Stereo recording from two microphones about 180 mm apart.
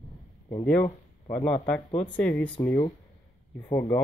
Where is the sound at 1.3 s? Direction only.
10° left (ahead or behind).